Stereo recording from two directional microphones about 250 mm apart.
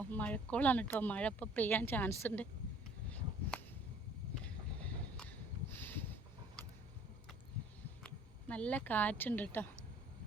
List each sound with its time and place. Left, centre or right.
0.0 s speech: centre
4.4 s a sound: centre
8.0 s speech: centre